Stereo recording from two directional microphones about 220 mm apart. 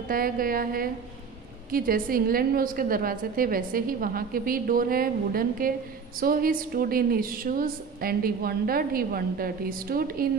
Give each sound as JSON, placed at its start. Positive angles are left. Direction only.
{"t": 0.1, "sound": "a woman's voice", "side_deg": -40}